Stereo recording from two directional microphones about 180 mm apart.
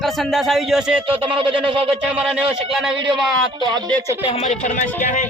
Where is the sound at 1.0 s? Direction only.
30° right (ahead or behind).